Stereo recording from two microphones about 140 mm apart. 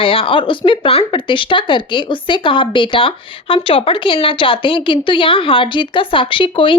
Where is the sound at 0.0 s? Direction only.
40° left (ahead or behind).